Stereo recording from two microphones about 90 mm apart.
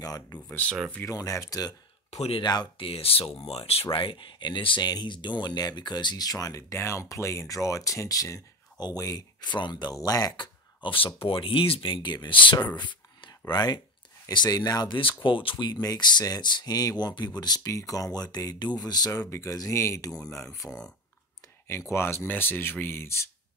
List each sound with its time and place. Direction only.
0.0 s speech: 45° left (ahead or behind)
0.5 s speech: 15° left (ahead or behind)
1.0 s speech: 35° left (ahead or behind)
2.8 s speech: 90° left
3.9 s speech: 75° left (ahead or behind)
4.8 s speech: 55° left (ahead or behind)
9.5 s speech: 55° left (ahead or behind)
9.9 s speech: 40° left (ahead or behind)
10.3 s speech: 60° left (ahead or behind)
15.2 s speech: 75° left (ahead or behind)
15.6 s speech: 45° left (ahead or behind); by 23.2 s 30° left (ahead or behind)